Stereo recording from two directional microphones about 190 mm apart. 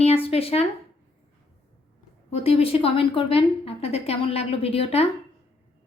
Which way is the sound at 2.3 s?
30° left (ahead or behind).